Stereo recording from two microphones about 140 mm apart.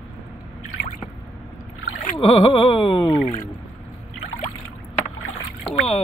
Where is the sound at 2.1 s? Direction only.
40° left (ahead or behind).